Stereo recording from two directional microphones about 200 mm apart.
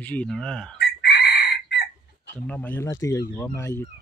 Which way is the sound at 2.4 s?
10° left (ahead or behind).